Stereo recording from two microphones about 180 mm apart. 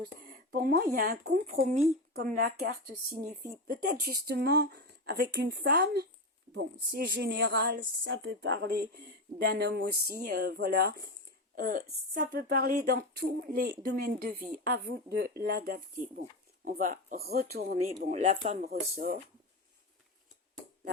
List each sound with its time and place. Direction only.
0.0 s speech: 55° right (ahead or behind)
6.5 s speech: 75° right (ahead or behind)
11.5 s speech: 50° right (ahead or behind)
18.1 s speech: 35° right (ahead or behind)
18.6 s speech: 55° right (ahead or behind)